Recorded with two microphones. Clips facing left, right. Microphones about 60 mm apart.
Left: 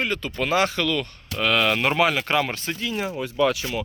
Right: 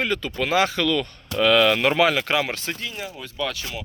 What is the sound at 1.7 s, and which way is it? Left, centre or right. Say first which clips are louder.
Speech: right 2 dB; right.